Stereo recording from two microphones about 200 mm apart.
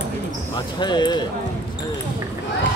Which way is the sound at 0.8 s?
20° left (ahead or behind).